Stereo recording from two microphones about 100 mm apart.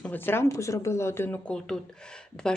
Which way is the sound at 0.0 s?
20° left (ahead or behind).